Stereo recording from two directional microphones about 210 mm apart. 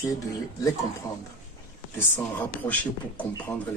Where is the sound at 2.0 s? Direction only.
10° left (ahead or behind).